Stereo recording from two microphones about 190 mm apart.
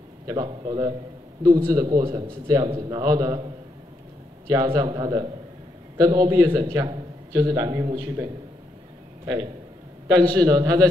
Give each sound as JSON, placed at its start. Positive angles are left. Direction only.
{"t": 0.3, "sound": "a man's voice", "side_deg": -20}
{"t": 4.5, "sound": "a man's voice", "side_deg": -20}